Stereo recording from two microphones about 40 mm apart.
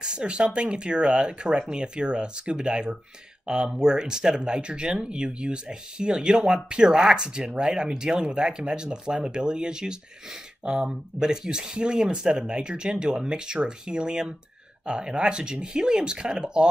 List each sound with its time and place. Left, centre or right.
0.0 s speech: right